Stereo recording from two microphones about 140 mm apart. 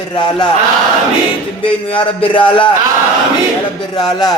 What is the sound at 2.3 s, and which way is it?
Speech, 35° left (ahead or behind).